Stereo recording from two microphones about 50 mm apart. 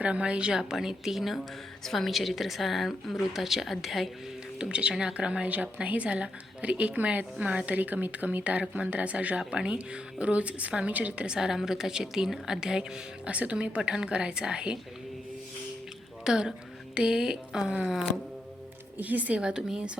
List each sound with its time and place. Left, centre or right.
0.0 s a woman's voice: right
0.7 s a woman's voice: centre
4.5 s a woman's voice: centre
9.4 s a woman's voice: centre
11.3 s a woman's voice: centre
13.2 s a woman's voice: right
16.2 s a woman's voice: centre
18.9 s speech: right
19.4 s a woman's voice: centre